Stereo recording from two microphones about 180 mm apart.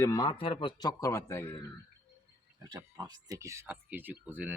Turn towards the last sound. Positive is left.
turn(degrees=-10)  # may be behind; listen again after turning